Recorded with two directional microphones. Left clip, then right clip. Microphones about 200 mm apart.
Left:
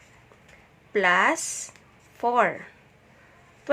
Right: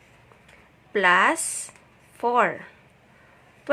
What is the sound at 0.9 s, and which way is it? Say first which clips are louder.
A woman's voice: right 2 dB; centre (ahead or behind).